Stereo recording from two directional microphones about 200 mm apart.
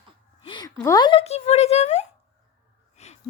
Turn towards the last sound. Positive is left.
turn(degrees=35)  # may be behind; listen again after turning